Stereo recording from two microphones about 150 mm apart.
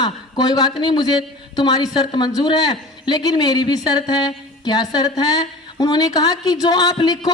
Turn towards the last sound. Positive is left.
turn(degrees=25)  # may be behind; listen again after turning